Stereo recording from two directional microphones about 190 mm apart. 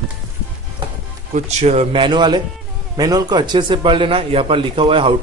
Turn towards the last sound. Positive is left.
turn(degrees=-30)  # may be behind; listen again after turning